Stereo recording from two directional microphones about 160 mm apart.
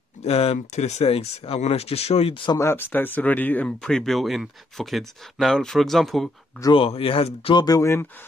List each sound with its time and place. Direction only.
0.2 s speech: 40° left (ahead or behind)
2.6 s speech: 15° left (ahead or behind)
6.6 s speech: 35° left (ahead or behind)
7.6 s speech: 20° left (ahead or behind)